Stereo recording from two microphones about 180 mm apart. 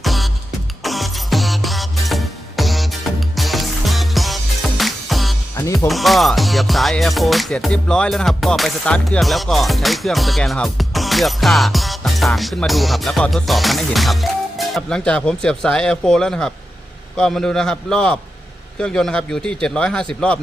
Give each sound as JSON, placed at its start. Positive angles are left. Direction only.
{"t": 0.0, "sound": "music", "side_deg": 0}